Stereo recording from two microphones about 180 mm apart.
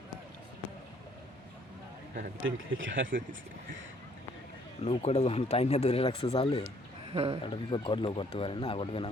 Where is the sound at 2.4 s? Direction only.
90° right.